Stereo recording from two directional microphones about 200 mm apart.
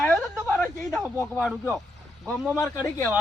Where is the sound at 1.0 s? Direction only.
15° right (ahead or behind).